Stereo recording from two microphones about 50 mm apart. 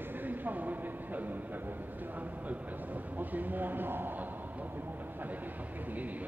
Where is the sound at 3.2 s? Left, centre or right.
Right.